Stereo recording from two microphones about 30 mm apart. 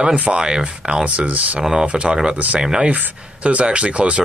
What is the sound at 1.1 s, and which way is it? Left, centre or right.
Speech, right.